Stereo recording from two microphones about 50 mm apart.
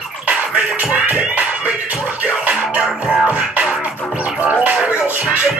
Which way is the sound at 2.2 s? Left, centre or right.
Right.